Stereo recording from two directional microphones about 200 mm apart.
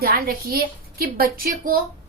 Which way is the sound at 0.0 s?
50° right (ahead or behind).